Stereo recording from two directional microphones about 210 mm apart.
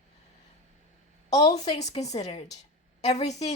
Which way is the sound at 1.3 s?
15° left (ahead or behind).